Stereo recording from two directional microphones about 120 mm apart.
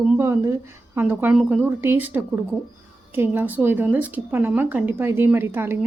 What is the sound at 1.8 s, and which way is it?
A woman's voice, 15° right (ahead or behind).